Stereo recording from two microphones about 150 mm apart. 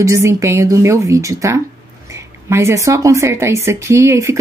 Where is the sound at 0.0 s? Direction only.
20° right (ahead or behind).